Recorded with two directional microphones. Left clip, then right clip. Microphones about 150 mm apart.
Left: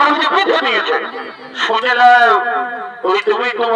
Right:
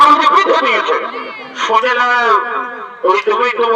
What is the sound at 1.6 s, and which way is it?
Music, 15° left (ahead or behind).